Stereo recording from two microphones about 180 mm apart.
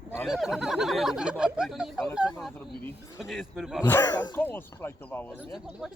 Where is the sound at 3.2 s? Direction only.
Centre (ahead or behind).